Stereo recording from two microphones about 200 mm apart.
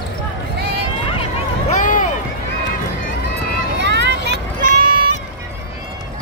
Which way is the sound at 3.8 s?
60° right (ahead or behind).